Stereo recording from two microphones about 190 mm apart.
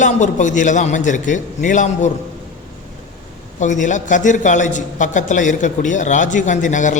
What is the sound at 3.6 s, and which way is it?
A man's voice, 40° left (ahead or behind).